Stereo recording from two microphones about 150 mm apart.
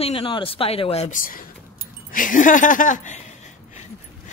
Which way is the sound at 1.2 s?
70° left (ahead or behind).